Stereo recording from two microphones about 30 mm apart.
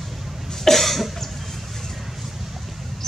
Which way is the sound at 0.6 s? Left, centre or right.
Centre.